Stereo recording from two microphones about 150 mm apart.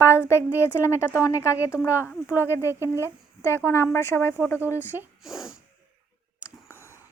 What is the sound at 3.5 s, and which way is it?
Speech, 15° left (ahead or behind).